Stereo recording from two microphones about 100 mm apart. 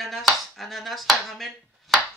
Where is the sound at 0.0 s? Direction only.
Centre (ahead or behind).